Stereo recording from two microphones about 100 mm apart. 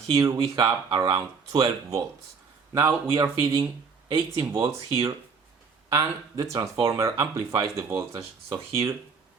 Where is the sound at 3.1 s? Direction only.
55° right (ahead or behind).